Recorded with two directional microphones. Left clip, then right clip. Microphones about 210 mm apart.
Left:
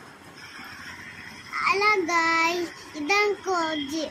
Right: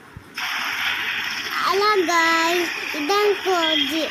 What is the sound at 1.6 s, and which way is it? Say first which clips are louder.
Child singing: right 3 dB; 20° right (ahead or behind).